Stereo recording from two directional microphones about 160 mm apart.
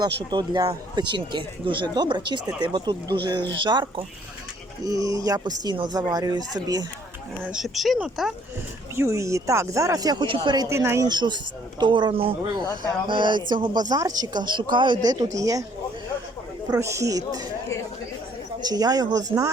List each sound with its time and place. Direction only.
0.3 s speech: 25° right (ahead or behind)
7.4 s speech: 5° right (ahead or behind)
9.0 s speech: 20° right (ahead or behind)
16.6 s speech: 20° right (ahead or behind)
18.6 s speech: 25° right (ahead or behind)